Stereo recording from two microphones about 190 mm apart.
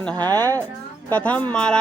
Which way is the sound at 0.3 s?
10° left (ahead or behind).